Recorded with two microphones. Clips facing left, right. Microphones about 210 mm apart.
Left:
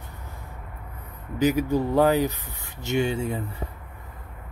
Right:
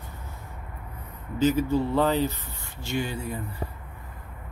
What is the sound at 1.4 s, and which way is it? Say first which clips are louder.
Speech: left 1 dB; 15° left (ahead or behind).